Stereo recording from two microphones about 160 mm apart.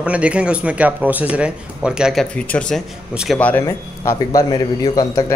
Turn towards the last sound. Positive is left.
turn(degrees=25)  # may be behind; listen again after turning